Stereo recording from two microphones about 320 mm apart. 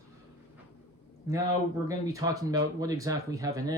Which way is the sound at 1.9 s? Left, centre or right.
Centre.